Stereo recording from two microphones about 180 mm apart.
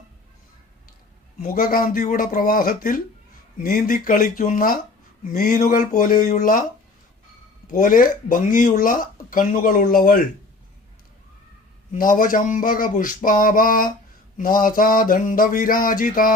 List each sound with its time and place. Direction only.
1.4 s speech: 50° left (ahead or behind)
7.7 s speech: 50° left (ahead or behind)
11.9 s speech: 50° left (ahead or behind)